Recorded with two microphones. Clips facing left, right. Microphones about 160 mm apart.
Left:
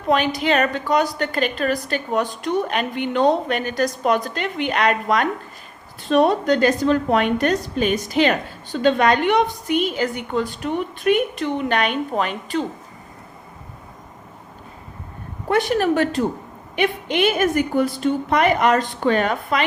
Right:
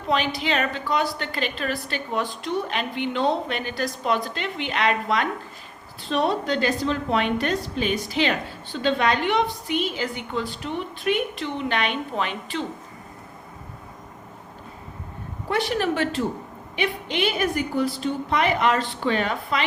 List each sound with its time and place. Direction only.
0.3 s a woman's voice: 45° left (ahead or behind)
15.4 s a woman's voice: 50° left (ahead or behind)